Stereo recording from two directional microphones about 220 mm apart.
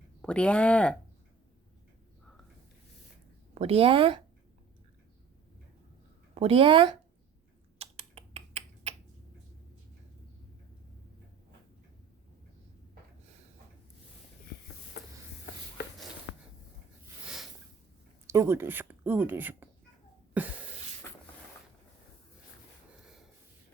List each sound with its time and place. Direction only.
0.2 s speech: 5° left (ahead or behind)
3.5 s speech: 25° right (ahead or behind)
6.3 s a woman's voice: 25° right (ahead or behind)
7.8 s typing: 30° right (ahead or behind)
18.3 s speech: 10° right (ahead or behind)
20.4 s a sound: 5° right (ahead or behind)